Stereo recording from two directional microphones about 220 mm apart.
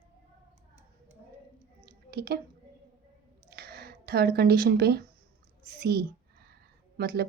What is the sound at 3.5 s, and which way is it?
Speech, 45° right (ahead or behind).